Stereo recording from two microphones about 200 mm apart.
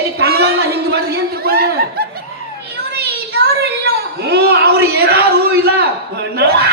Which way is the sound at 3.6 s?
55° right (ahead or behind).